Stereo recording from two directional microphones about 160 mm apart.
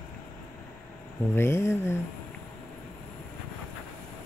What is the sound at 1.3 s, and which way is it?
Speech, 15° left (ahead or behind).